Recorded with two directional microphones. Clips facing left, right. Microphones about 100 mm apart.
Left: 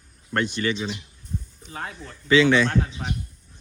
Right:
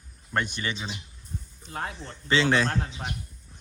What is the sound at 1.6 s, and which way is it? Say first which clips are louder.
Speech: right 5 dB; 30° right (ahead or behind).